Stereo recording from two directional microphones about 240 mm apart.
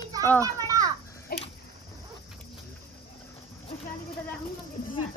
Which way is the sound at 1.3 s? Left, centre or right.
Left.